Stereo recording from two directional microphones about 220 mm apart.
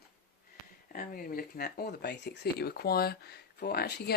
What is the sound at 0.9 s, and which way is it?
Speech, 40° left (ahead or behind).